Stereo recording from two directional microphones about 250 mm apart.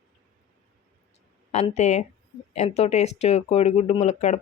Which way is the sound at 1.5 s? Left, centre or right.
Left.